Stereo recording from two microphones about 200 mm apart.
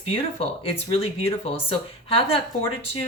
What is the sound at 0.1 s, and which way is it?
Speech, 30° left (ahead or behind).